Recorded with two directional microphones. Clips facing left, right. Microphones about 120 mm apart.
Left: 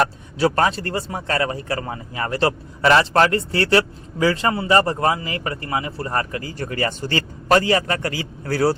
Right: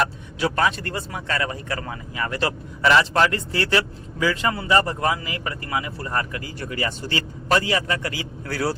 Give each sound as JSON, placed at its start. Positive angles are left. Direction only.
{"t": 0.0, "sound": "speech", "side_deg": 35}